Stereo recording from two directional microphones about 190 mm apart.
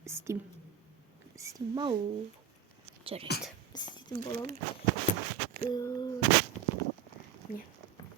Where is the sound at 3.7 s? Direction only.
20° left (ahead or behind).